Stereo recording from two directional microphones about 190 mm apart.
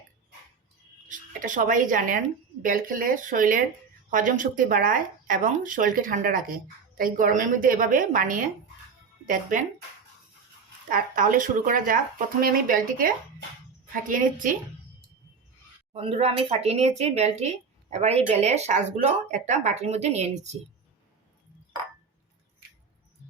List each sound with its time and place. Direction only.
1.0 s speech: 45° right (ahead or behind)
10.8 s speech: 45° right (ahead or behind)
15.9 s speech: 30° right (ahead or behind)